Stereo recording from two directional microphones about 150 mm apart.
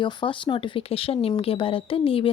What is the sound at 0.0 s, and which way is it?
Speech, 30° left (ahead or behind).